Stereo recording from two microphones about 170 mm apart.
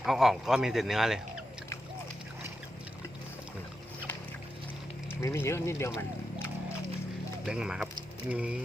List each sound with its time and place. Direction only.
0.0 s a man's voice: centre (ahead or behind)
5.2 s speech: 15° left (ahead or behind)
7.4 s speech: 5° right (ahead or behind)